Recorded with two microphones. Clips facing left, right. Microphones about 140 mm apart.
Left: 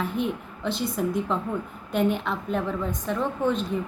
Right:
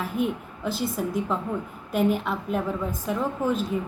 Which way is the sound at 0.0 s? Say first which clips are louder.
Right 1 dB; 5° right (ahead or behind).